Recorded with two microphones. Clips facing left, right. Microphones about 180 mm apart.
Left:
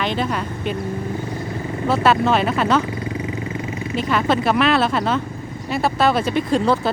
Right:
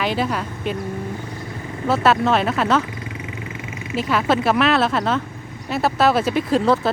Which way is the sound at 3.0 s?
35° left (ahead or behind).